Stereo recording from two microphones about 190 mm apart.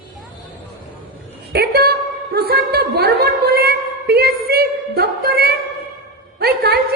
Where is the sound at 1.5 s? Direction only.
55° right (ahead or behind).